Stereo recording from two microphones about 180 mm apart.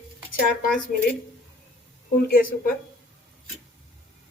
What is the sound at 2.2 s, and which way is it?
Speech, 55° left (ahead or behind).